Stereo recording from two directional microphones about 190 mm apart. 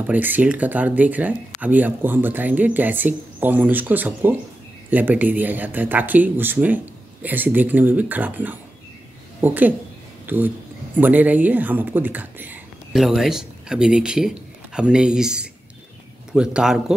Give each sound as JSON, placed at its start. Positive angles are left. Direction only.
{"t": 0.0, "sound": "speech", "side_deg": -10}